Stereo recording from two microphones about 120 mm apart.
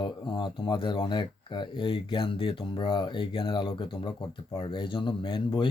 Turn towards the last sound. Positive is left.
turn(degrees=40)  # may be behind; listen again after turning